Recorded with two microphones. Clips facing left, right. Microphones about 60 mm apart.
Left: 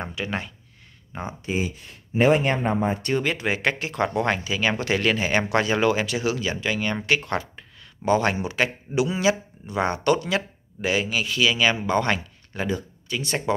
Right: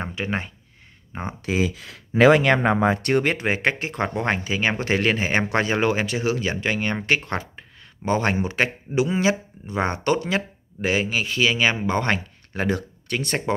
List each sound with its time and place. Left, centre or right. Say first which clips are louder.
0.0 s speech: right 2 dB; right
1.4 s speech: right 4 dB; right
12.6 s speech: right 3 dB; right